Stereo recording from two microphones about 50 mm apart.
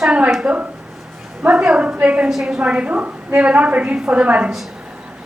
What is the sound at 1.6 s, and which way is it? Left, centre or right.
Speech, centre.